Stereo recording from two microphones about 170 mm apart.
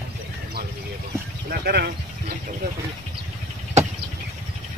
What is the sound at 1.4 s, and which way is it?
Speech, 65° right (ahead or behind).